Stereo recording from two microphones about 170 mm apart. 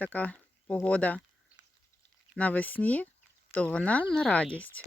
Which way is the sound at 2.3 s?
10° left (ahead or behind).